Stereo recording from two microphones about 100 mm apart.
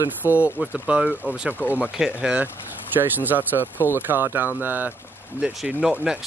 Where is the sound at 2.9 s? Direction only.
20° right (ahead or behind).